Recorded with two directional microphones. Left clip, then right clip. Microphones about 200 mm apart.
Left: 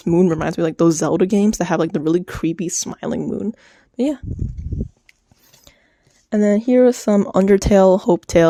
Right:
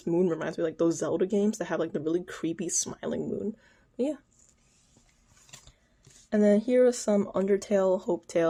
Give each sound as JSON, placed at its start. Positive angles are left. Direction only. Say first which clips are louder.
{"t": 0.0, "sound": "speech", "louder": "left 10 dB", "side_deg": 40}
{"t": 6.3, "sound": "speech", "louder": "left 7 dB", "side_deg": 40}